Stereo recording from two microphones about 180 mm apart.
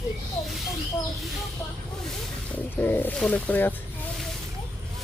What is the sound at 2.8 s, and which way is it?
Speech, 10° left (ahead or behind).